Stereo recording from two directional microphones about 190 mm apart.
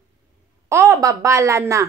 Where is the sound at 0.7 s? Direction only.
15° right (ahead or behind).